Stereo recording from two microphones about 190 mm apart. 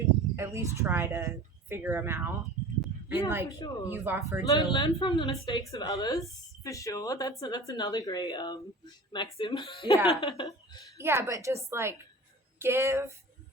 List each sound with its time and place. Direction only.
0.3 s a woman's voice: 15° right (ahead or behind)
4.4 s a woman's voice: 20° left (ahead or behind)
10.9 s a woman's voice: 15° right (ahead or behind)